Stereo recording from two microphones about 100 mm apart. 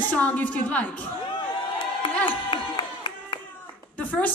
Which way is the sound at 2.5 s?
50° left (ahead or behind).